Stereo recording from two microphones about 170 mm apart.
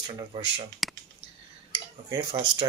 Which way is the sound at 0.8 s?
Centre (ahead or behind).